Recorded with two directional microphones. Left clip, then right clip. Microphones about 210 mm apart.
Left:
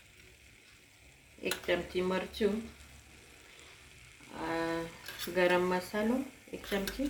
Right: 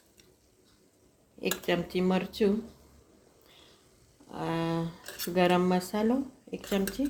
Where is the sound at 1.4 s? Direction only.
55° right (ahead or behind).